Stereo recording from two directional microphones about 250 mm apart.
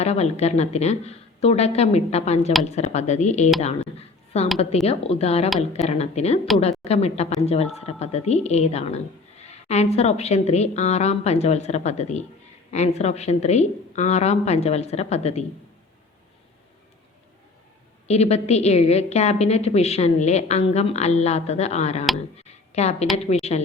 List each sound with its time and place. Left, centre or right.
0.0 s a woman's voice: left
4.5 s a woman's voice: left
18.1 s a woman's voice: left
22.4 s a sound: left
23.1 s a woman's voice: left